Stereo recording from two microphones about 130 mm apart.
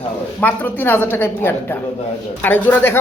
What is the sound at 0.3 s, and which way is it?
Speech, 15° left (ahead or behind).